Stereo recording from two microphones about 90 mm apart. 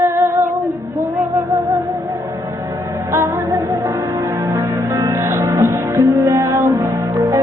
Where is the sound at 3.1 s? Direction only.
35° right (ahead or behind).